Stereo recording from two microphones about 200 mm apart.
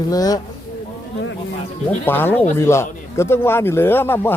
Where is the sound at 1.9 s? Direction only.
10° left (ahead or behind).